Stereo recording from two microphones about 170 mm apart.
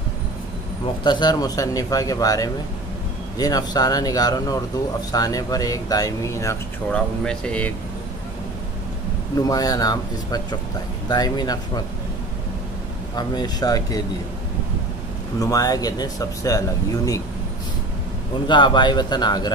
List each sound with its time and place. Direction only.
1.0 s speech: 25° left (ahead or behind)
6.9 s speech: 5° left (ahead or behind)
9.4 s speech: 20° left (ahead or behind)
13.1 s speech: 25° left (ahead or behind)
15.3 s speech: 20° left (ahead or behind)
18.5 s speech: 25° left (ahead or behind)